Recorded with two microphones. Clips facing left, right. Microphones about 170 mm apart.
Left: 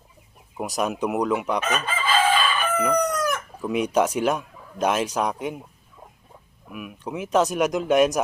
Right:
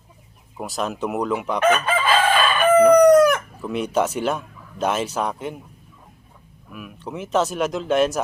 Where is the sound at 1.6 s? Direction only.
65° right (ahead or behind).